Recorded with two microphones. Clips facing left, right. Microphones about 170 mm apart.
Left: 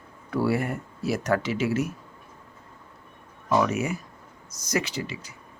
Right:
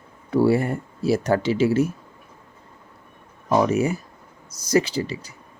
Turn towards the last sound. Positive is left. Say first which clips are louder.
# right 6 dB
turn(degrees=-35)  # may be behind; listen again after turning